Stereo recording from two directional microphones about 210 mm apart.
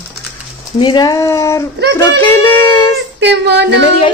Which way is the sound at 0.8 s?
20° left (ahead or behind).